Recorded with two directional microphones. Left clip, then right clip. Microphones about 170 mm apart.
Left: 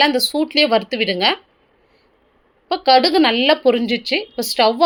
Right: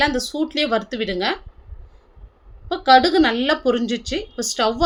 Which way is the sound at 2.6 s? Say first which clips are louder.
Left 1 dB; 15° left (ahead or behind).